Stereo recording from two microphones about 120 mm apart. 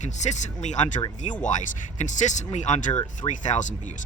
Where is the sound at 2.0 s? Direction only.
90° left.